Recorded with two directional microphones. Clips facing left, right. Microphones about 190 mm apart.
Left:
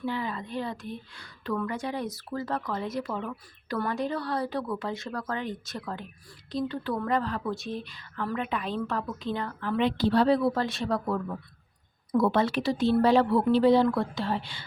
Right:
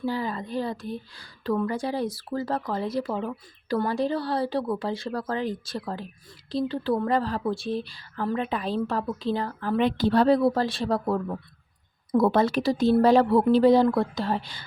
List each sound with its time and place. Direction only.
0.0 s a woman's voice: 35° right (ahead or behind)